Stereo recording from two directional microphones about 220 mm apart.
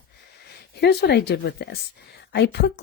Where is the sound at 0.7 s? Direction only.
50° left (ahead or behind).